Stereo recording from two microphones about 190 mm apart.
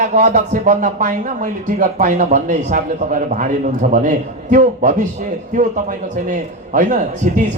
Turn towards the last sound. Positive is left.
turn(degrees=-45)  # may be behind; listen again after turning